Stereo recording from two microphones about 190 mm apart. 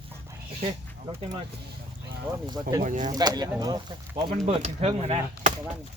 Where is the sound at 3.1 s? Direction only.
20° right (ahead or behind).